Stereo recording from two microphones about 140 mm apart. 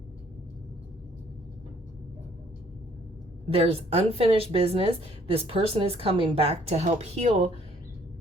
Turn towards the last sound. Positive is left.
turn(degrees=-50)  # may be behind; listen again after turning